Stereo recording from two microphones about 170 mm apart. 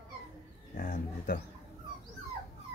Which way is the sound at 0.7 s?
50° left (ahead or behind).